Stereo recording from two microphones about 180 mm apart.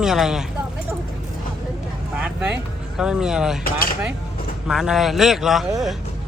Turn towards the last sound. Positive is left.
turn(degrees=0)  # may be behind; listen again after turning